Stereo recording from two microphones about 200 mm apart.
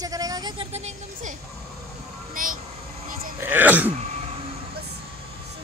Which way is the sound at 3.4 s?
10° right (ahead or behind).